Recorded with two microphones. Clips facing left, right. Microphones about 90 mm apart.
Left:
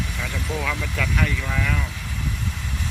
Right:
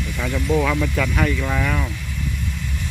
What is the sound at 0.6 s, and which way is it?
Speech, 15° right (ahead or behind).